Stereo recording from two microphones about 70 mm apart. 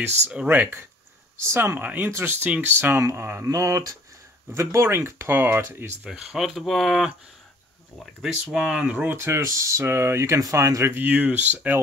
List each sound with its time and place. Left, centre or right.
0.3 s speech: right
1.4 s speech: right
1.8 s speech: right
2.0 s speech: right
4.6 s speech: right
6.0 s speech: centre
8.5 s speech: centre
9.1 s speech: right
11.1 s speech: centre